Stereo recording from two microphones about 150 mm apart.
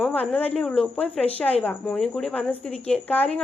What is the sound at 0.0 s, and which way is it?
A woman's voice, 5° left (ahead or behind).